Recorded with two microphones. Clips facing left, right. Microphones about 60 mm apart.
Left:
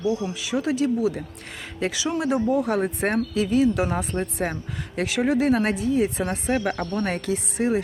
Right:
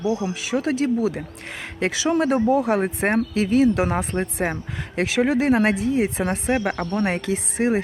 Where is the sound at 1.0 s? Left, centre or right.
Right.